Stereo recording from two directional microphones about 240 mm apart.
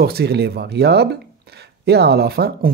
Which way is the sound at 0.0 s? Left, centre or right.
Right.